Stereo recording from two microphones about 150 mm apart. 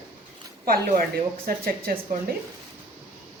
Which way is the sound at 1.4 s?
75° right (ahead or behind).